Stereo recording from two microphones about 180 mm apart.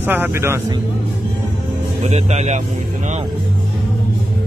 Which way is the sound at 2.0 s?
35° right (ahead or behind).